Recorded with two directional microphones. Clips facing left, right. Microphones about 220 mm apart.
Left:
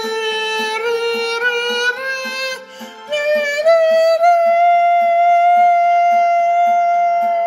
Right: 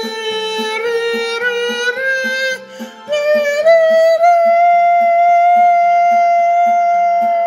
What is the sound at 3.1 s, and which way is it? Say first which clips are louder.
Music: right 4 dB; 50° right (ahead or behind).